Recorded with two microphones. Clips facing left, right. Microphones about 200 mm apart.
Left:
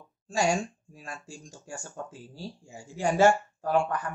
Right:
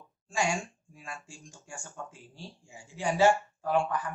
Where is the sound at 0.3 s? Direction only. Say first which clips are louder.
Left 4 dB; 40° left (ahead or behind).